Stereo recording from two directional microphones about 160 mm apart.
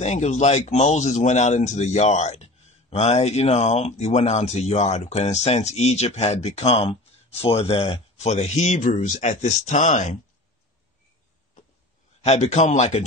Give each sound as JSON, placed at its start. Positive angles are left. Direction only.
{"t": 0.0, "sound": "speech", "side_deg": 45}
{"t": 12.2, "sound": "speech", "side_deg": 45}